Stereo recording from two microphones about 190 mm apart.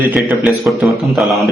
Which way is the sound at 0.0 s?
10° right (ahead or behind).